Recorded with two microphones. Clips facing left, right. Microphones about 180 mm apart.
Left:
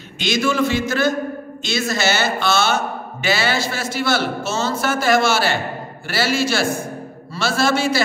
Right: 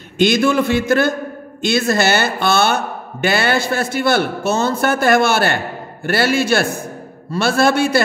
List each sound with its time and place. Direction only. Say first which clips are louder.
0.2 s speech: right 5 dB; 55° right (ahead or behind)